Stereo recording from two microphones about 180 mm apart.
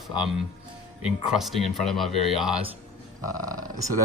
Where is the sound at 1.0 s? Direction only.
Centre (ahead or behind).